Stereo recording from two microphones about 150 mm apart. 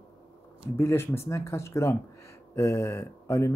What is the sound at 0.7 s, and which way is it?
Speech, 15° left (ahead or behind).